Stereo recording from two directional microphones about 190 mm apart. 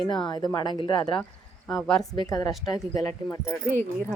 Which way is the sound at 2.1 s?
20° left (ahead or behind).